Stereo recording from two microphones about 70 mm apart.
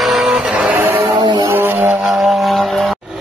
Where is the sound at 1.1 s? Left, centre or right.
Right.